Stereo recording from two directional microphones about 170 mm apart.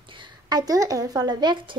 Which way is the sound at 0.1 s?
25° right (ahead or behind).